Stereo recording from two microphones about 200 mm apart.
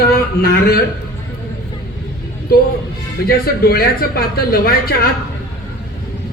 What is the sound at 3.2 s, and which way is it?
Speech, 50° left (ahead or behind).